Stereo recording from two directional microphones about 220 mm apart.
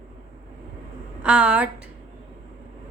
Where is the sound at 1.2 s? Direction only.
5° right (ahead or behind).